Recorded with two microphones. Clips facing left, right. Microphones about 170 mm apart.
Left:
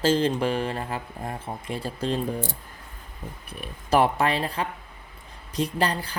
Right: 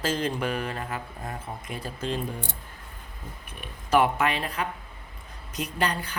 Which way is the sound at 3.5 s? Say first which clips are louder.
Even; 35° left (ahead or behind).